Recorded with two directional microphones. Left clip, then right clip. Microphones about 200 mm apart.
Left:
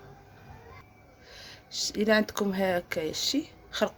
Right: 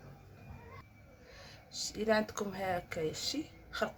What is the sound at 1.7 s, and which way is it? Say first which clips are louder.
Speech: left 7 dB; 40° left (ahead or behind).